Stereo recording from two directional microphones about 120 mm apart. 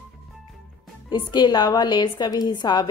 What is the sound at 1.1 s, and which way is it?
A woman's voice, 35° left (ahead or behind).